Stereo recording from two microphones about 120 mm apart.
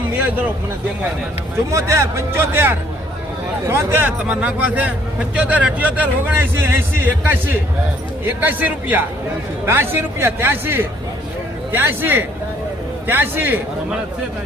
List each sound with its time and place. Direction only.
1.7 s speech: 25° right (ahead or behind)